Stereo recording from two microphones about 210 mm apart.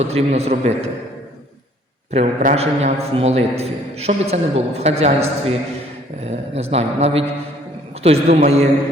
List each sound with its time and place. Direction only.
0.0 s a man's voice: 30° right (ahead or behind)
2.0 s a man's voice: 30° right (ahead or behind)